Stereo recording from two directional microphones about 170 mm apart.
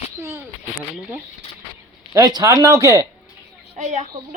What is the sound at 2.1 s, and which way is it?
Speech, 20° right (ahead or behind).